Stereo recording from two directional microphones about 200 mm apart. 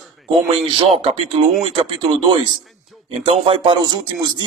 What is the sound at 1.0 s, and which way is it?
Speech, 30° right (ahead or behind).